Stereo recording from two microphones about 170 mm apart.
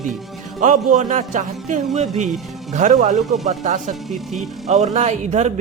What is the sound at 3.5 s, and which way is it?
Speech, 45° right (ahead or behind).